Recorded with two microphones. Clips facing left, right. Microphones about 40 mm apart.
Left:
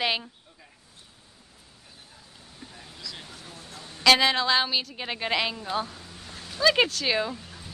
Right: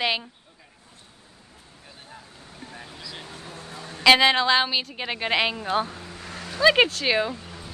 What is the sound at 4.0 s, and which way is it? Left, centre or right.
A woman's voice, centre.